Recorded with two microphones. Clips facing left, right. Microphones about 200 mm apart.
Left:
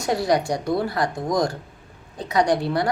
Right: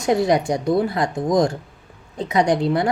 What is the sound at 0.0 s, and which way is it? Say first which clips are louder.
A woman's voice: right 3 dB; 20° right (ahead or behind).